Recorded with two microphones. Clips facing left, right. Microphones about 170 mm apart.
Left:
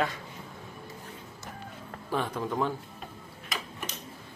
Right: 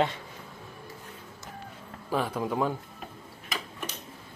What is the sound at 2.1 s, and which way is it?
Speech, 5° right (ahead or behind).